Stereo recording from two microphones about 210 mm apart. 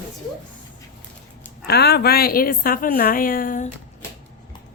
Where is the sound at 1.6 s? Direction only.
50° left (ahead or behind).